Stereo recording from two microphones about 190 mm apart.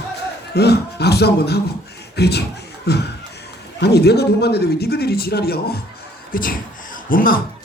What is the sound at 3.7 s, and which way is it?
Speech, 60° left (ahead or behind).